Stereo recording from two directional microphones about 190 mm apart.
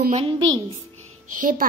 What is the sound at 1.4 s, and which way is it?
Speech, 45° right (ahead or behind).